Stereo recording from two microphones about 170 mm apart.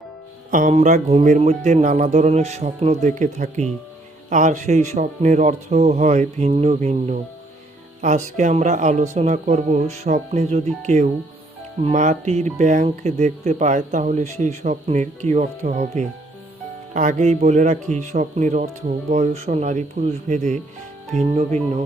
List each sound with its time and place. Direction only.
0.5 s speech: 50° right (ahead or behind)